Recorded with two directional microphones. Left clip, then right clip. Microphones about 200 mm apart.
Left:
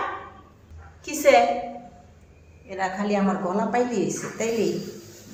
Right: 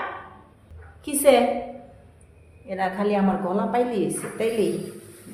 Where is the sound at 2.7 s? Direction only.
30° right (ahead or behind).